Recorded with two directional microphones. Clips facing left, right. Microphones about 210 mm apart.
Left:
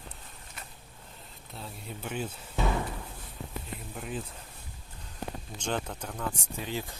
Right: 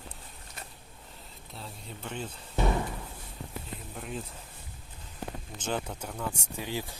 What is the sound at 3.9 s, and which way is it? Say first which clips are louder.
Speech: left 1 dB; centre (ahead or behind).